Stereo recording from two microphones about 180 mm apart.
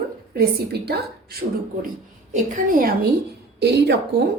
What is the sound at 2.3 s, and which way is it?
Speech, 50° right (ahead or behind).